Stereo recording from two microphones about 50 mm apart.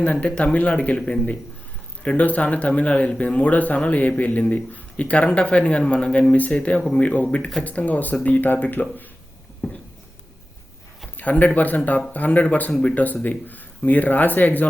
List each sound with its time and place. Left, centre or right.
0.0 s speech: left
11.2 s speech: left